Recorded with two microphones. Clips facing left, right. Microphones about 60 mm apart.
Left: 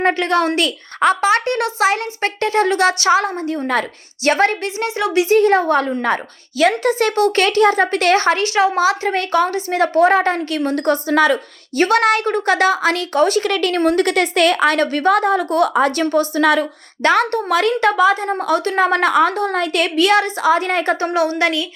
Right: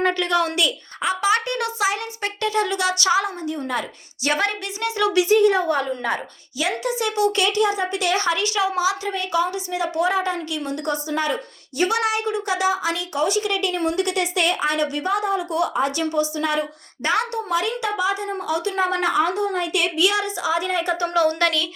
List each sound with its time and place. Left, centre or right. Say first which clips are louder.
0.0 s speech: left 4 dB; left
1.3 s speech: left 5 dB; left
3.7 s speech: left 7 dB; left
11.8 s a woman's voice: left 7 dB; left
21.0 s speech: left 3 dB; left
21.2 s a woman's voice: left 2 dB; centre